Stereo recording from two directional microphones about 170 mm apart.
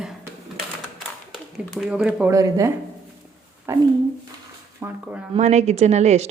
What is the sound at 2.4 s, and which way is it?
Speech, 20° right (ahead or behind).